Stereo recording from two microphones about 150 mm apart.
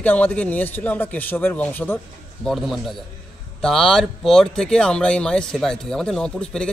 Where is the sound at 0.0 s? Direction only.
10° left (ahead or behind).